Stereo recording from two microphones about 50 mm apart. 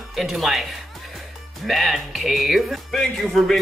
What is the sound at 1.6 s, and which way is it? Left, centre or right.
Speech, centre.